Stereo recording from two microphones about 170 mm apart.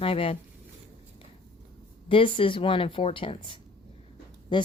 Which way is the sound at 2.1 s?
30° left (ahead or behind).